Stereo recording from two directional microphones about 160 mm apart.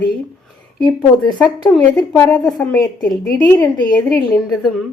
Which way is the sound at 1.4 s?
10° left (ahead or behind).